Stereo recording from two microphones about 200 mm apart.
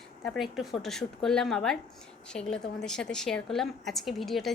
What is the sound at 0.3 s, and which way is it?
A woman's voice, centre (ahead or behind).